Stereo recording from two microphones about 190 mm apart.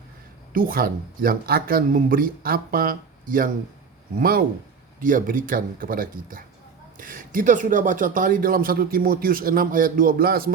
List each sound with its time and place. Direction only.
0.5 s speech: 50° right (ahead or behind)